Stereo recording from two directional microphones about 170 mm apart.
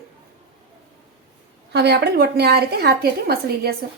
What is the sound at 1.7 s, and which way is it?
A woman's voice, 75° right (ahead or behind).